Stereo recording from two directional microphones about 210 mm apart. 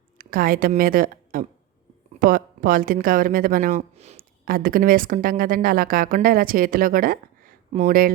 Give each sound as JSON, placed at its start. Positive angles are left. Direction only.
{"t": 0.2, "sound": "a woman's voice", "side_deg": -45}
{"t": 4.4, "sound": "a woman's voice", "side_deg": -45}